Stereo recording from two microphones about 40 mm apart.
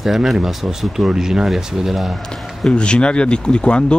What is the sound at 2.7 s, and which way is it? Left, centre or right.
Speech, left.